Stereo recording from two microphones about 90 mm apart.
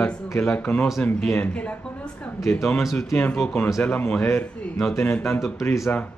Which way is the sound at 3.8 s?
25° left (ahead or behind).